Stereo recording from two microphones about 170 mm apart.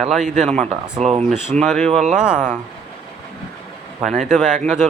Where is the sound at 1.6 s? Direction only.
Centre (ahead or behind).